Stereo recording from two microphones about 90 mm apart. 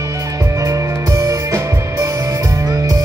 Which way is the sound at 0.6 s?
40° right (ahead or behind).